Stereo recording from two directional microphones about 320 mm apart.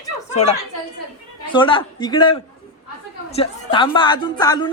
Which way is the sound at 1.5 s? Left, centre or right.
Centre.